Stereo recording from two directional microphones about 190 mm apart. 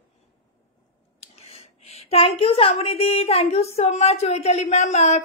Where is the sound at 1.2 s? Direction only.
35° left (ahead or behind).